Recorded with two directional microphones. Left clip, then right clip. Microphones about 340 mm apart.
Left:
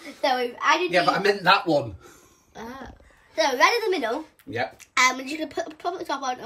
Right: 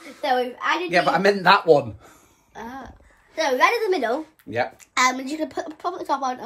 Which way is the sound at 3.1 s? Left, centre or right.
Centre.